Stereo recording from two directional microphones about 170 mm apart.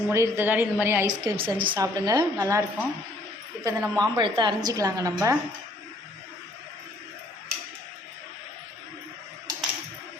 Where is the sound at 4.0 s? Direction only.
25° right (ahead or behind).